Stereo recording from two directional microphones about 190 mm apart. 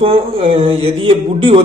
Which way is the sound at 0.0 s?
30° right (ahead or behind).